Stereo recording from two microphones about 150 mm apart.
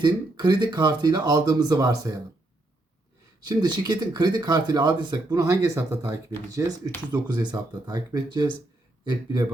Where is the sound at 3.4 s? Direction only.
30° right (ahead or behind).